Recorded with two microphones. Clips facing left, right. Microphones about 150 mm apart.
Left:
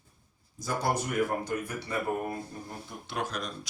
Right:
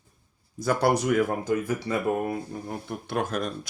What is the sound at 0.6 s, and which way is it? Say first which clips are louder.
Speech: right 7 dB; 70° right (ahead or behind).